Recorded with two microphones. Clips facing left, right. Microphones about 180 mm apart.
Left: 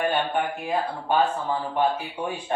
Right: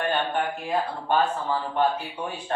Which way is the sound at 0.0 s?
10° left (ahead or behind).